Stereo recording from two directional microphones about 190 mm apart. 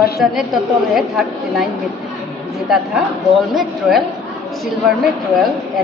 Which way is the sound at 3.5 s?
Centre (ahead or behind).